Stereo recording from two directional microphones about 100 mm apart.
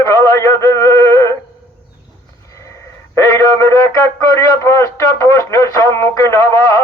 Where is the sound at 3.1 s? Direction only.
30° left (ahead or behind).